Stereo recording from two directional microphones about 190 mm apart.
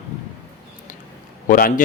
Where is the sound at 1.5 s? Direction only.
45° left (ahead or behind).